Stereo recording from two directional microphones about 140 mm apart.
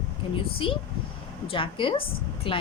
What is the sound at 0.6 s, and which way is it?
A woman's voice, 40° left (ahead or behind).